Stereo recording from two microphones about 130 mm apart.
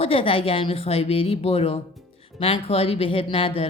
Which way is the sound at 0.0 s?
45° left (ahead or behind).